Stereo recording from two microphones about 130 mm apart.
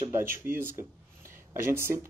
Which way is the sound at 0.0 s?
20° right (ahead or behind).